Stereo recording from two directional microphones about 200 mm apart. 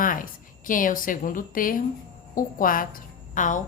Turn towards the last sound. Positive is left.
turn(degrees=40)  # may be behind; listen again after turning